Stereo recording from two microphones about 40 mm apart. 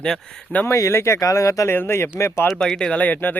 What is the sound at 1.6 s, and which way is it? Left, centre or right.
Speech, left.